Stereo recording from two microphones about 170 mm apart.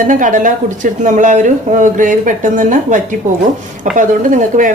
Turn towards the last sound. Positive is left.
turn(degrees=-50)  # may be behind; listen again after turning